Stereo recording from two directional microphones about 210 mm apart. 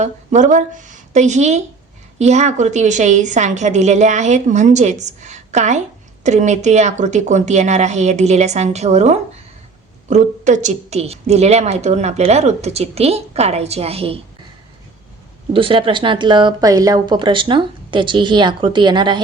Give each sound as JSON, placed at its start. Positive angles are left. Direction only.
{"t": 0.0, "sound": "a woman's voice", "side_deg": -35}
{"t": 15.5, "sound": "a woman's voice", "side_deg": -25}